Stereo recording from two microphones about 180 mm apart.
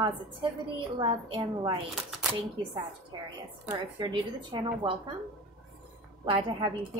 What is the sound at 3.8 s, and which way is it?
A woman's voice, 25° right (ahead or behind).